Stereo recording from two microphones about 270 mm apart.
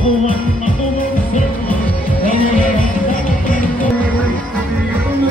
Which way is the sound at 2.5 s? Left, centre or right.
Left.